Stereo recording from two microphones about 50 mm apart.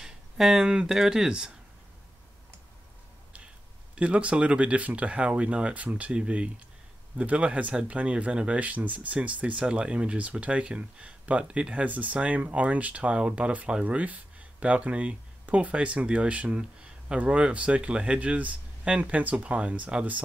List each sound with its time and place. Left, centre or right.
0.0 s a sound: centre
0.8 s speech: centre
3.9 s speech: right